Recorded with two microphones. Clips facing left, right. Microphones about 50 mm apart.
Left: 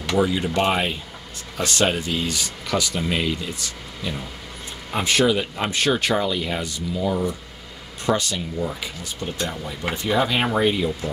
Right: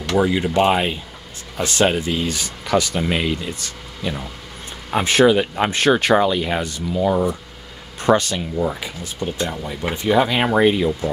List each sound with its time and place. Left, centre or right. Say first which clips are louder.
0.1 s speech: right 3 dB; right
9.6 s speech: right 2 dB; right